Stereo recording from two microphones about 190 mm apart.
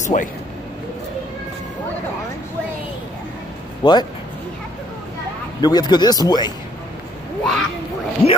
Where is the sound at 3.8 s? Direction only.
20° left (ahead or behind).